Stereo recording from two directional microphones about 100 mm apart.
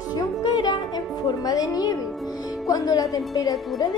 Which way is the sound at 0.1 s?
45° left (ahead or behind).